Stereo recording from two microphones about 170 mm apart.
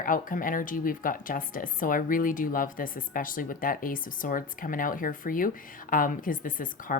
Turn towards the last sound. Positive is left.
turn(degrees=55)  # may be behind; listen again after turning